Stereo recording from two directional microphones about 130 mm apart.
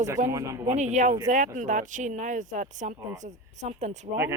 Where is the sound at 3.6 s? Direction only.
60° right (ahead or behind).